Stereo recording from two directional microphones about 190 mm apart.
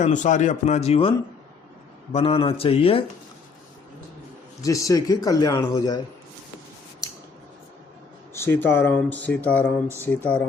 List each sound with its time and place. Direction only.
0.0 s speech: 40° left (ahead or behind)
2.1 s speech: 30° left (ahead or behind)
4.6 s speech: 15° left (ahead or behind)
8.3 s speech: 15° left (ahead or behind)